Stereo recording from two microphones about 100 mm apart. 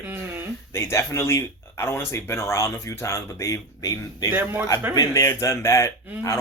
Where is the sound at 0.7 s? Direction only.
30° left (ahead or behind).